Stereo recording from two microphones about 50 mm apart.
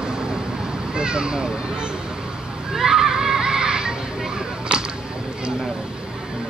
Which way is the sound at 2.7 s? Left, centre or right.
Centre.